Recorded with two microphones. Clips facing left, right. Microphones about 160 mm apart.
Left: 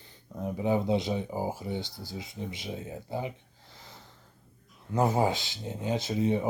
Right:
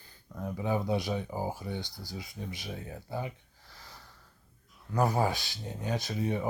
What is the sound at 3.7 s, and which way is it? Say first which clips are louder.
Snort: left 1 dB; 20° left (ahead or behind).